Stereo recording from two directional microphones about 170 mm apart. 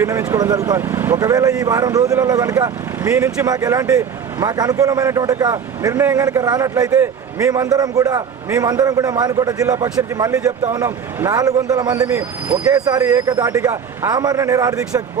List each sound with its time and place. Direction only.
0.0 s speech: 15° right (ahead or behind)
12.0 s speech: 10° right (ahead or behind)
12.7 s speech: 20° right (ahead or behind)